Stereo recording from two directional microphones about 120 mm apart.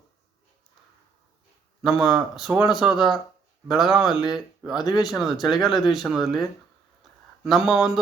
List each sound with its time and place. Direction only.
1.8 s speech: centre (ahead or behind)
4.1 s speech: 35° left (ahead or behind)
4.4 s speech: 5° right (ahead or behind)